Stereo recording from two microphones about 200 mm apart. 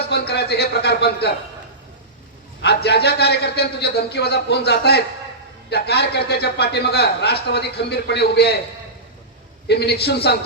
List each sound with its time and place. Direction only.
0.0 s speech: 55° left (ahead or behind)
2.6 s a man's voice: 55° left (ahead or behind)
9.6 s a man's voice: 55° left (ahead or behind)